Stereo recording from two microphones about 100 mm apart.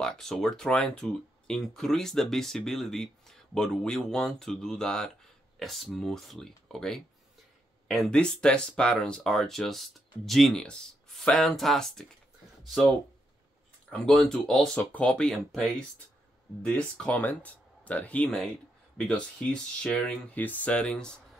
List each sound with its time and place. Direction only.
0.0 s speech: 5° left (ahead or behind)